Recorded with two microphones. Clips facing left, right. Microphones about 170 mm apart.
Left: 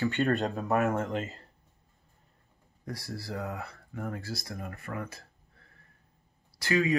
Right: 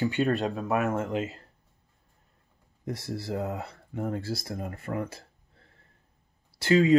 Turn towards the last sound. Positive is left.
turn(degrees=-25)  # may be behind; listen again after turning